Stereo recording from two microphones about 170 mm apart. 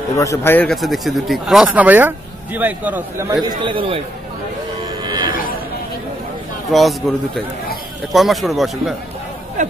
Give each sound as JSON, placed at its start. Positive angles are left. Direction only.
{"t": 0.1, "sound": "a man's voice", "side_deg": 15}
{"t": 0.7, "sound": "speech", "side_deg": 0}
{"t": 3.4, "sound": "a man's voice", "side_deg": -30}
{"t": 5.0, "sound": "a sound", "side_deg": -25}
{"t": 6.7, "sound": "speech", "side_deg": 0}
{"t": 9.6, "sound": "a sound", "side_deg": -45}